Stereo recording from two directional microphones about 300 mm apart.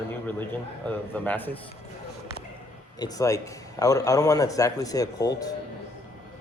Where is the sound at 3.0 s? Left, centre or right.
Centre.